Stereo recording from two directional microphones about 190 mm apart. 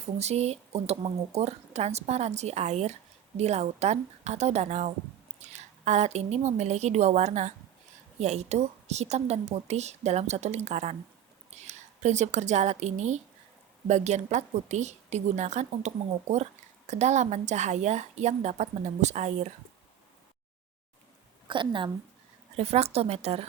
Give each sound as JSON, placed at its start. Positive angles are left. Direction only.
{"t": 0.0, "sound": "a woman's voice", "side_deg": -35}
{"t": 21.4, "sound": "a woman's voice", "side_deg": -25}